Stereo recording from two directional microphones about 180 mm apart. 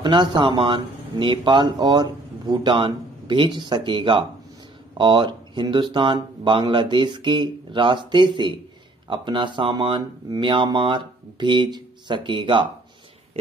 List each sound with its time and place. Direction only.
0.0 s speech: 25° right (ahead or behind)